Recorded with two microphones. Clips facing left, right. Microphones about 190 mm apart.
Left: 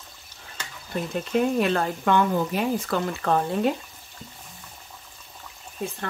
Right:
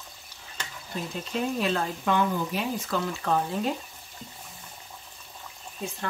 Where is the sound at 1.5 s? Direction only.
60° left (ahead or behind).